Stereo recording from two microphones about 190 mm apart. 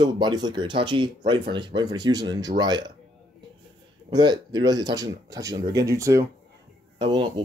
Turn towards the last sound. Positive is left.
turn(degrees=-25)  # may be behind; listen again after turning